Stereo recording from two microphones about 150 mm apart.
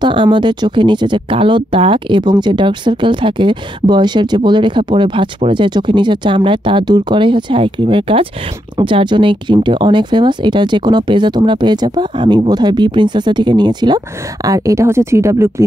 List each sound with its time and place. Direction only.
0.0 s speech: 35° right (ahead or behind)